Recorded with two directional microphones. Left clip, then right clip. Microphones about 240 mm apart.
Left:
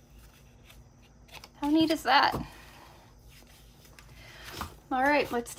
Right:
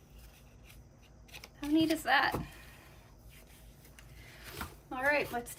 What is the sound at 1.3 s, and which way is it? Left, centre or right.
Speech, centre.